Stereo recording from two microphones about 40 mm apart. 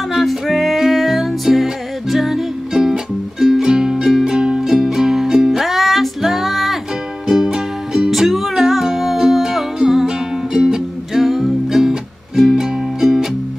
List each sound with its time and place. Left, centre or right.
0.1 s music: centre
7.2 s music: centre
8.1 s music: centre
11.2 s music: centre